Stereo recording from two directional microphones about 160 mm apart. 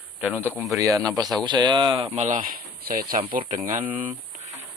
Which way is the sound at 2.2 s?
60° right (ahead or behind).